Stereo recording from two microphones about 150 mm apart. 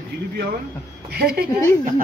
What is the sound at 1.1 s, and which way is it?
Speech, 90° right.